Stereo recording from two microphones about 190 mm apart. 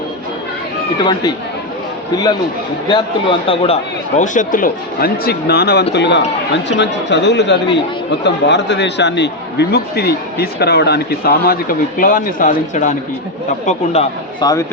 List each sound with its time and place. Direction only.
0.9 s a man's voice: 25° left (ahead or behind)
2.9 s a man's voice: 30° left (ahead or behind)
4.2 s a man's voice: 45° left (ahead or behind)
14.4 s a man's voice: 20° left (ahead or behind)